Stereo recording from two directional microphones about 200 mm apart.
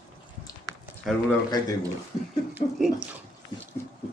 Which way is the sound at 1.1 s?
Centre (ahead or behind).